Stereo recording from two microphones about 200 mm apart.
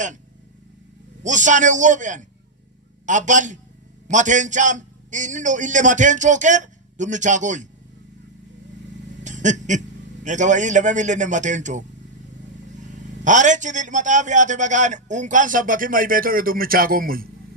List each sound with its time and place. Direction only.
1.2 s a man's voice: 40° right (ahead or behind)
9.2 s a sound: 40° right (ahead or behind)
10.2 s a man's voice: 40° right (ahead or behind)